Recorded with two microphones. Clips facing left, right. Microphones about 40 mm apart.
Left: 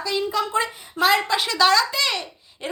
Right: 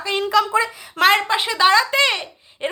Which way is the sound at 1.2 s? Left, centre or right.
Right.